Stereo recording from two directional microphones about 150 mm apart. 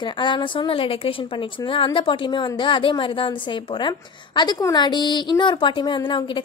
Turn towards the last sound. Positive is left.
turn(degrees=35)  # may be behind; listen again after turning